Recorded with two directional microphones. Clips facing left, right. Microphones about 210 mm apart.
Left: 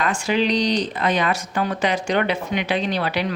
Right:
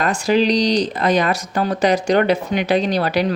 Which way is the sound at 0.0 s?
40° right (ahead or behind).